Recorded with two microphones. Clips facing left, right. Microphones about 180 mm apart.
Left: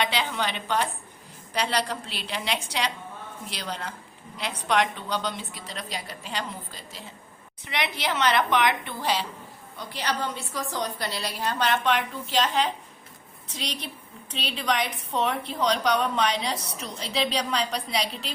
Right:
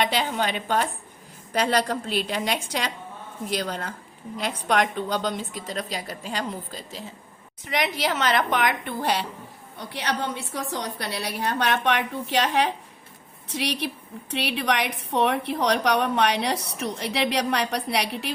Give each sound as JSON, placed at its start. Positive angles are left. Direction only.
{"t": 0.0, "sound": "a woman's voice", "side_deg": -45}
{"t": 9.7, "sound": "a woman's voice", "side_deg": -65}